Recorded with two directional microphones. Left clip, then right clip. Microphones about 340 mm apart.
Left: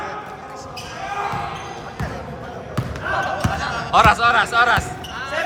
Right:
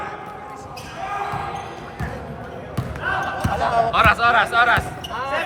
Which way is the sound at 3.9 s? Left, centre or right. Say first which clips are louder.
Left 4 dB; centre.